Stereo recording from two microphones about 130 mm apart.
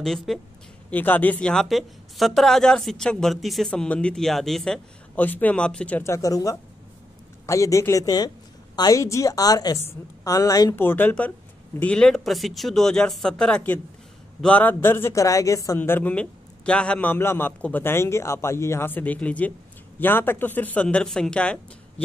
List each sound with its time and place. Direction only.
0.0 s speech: 5° left (ahead or behind)
0.8 s speech: 15° left (ahead or behind)
6.0 s a woman's voice: 25° left (ahead or behind)
10.8 s a man's voice: 15° left (ahead or behind)